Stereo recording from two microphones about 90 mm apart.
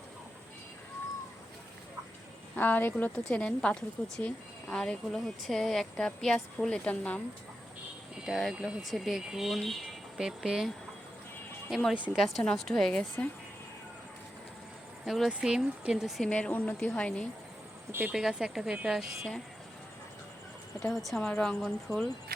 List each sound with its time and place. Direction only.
2.6 s speech: 20° left (ahead or behind)
8.2 s speech: centre (ahead or behind)
11.7 s speech: centre (ahead or behind)
15.0 s speech: centre (ahead or behind)
16.3 s speech: 15° left (ahead or behind)
18.1 s speech: 5° right (ahead or behind)
20.8 s speech: centre (ahead or behind)